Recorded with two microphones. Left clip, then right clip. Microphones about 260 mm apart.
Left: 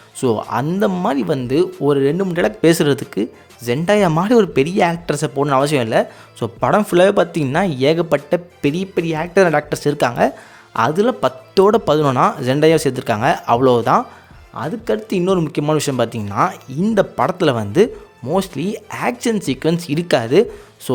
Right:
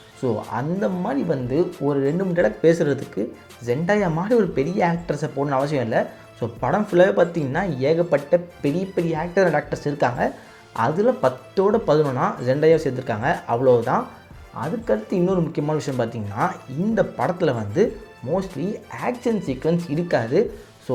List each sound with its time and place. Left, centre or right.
0.2 s speech: left